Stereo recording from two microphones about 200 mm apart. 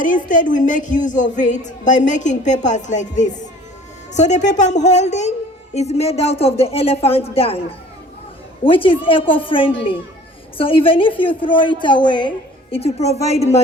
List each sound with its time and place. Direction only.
0.0 s speech: 40° left (ahead or behind)
8.6 s speech: 25° left (ahead or behind)